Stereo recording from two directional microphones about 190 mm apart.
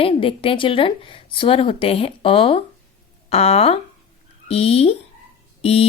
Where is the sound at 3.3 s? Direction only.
30° left (ahead or behind).